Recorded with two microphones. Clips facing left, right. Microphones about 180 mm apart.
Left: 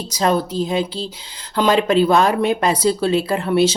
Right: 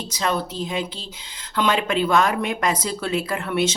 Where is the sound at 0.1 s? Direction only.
40° left (ahead or behind).